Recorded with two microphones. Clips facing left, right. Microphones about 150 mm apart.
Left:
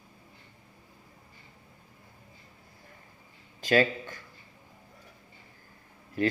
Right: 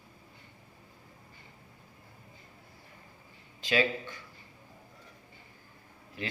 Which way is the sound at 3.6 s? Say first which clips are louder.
Left 4 dB; 45° left (ahead or behind).